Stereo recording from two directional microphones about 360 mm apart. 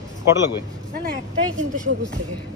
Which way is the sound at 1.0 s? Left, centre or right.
Right.